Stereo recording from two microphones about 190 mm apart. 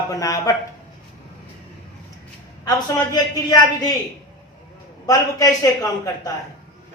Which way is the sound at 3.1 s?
20° left (ahead or behind).